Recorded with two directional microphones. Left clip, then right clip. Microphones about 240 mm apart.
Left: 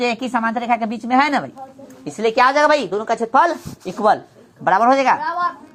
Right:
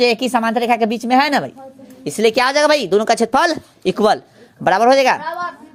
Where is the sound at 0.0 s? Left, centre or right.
Right.